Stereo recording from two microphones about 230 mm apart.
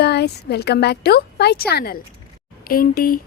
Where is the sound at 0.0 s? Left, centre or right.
Left.